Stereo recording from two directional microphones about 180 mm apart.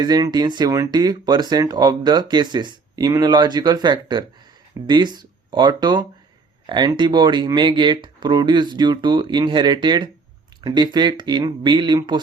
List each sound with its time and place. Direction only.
0.0 s speech: 20° right (ahead or behind)